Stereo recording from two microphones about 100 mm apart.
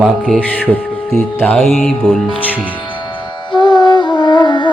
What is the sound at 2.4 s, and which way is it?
Speech, 15° left (ahead or behind).